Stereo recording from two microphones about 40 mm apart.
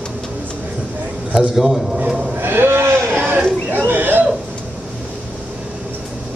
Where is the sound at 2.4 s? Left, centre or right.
Right.